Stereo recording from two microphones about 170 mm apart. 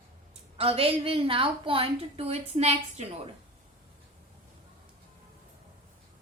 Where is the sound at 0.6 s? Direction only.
35° right (ahead or behind).